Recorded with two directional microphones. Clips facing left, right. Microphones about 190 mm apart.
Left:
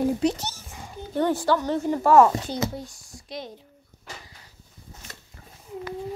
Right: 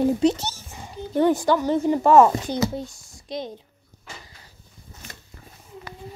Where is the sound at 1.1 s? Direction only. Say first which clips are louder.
Right 3 dB; 15° right (ahead or behind).